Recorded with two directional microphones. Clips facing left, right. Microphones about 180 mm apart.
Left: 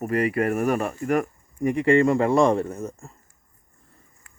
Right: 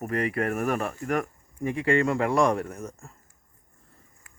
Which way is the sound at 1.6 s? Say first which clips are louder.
Left 5 dB; 20° left (ahead or behind).